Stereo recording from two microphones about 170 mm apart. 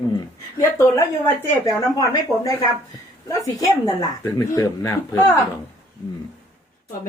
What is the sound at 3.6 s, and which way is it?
Speech, 20° left (ahead or behind).